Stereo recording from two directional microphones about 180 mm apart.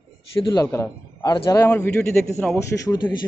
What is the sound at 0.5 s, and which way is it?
A man's voice, 20° left (ahead or behind).